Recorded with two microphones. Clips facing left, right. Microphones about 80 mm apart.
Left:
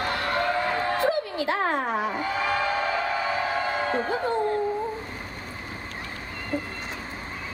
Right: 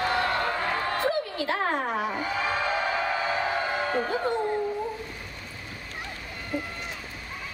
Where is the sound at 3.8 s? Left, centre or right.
Left.